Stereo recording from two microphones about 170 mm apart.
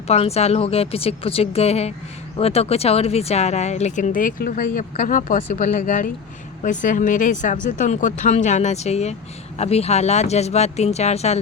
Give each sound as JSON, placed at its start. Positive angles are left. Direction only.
{"t": 0.1, "sound": "speech", "side_deg": 40}